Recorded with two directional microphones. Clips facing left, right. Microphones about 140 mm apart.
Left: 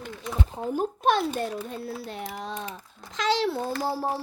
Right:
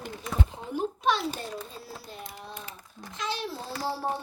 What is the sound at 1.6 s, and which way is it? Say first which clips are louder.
A child's voice: left 8 dB; 60° left (ahead or behind).